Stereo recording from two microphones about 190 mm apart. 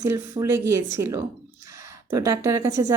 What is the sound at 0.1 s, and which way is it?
A woman's voice, 15° right (ahead or behind).